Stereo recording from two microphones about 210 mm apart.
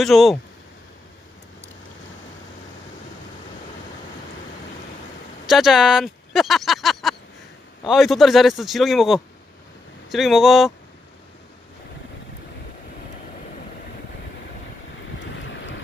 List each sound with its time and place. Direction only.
0.0 s a man's voice: centre (ahead or behind)
5.5 s a man's voice: centre (ahead or behind)